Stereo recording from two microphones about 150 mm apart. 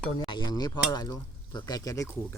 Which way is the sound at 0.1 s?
30° left (ahead or behind).